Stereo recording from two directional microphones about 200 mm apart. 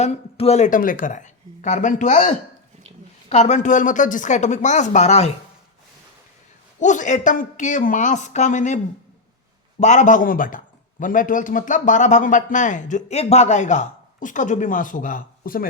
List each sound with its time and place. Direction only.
0.0 s speech: 30° left (ahead or behind)
6.7 s speech: 40° left (ahead or behind)
9.8 s speech: 35° left (ahead or behind)